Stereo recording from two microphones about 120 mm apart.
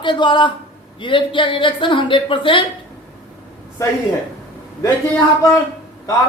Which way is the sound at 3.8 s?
25° left (ahead or behind).